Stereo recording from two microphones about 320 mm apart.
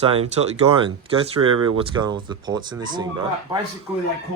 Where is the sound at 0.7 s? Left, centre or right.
Centre.